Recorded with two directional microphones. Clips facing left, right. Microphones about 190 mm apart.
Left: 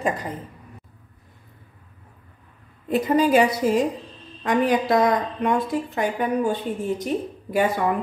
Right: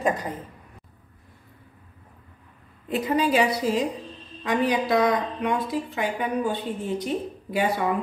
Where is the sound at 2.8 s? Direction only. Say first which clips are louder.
Left 4 dB; 45° left (ahead or behind).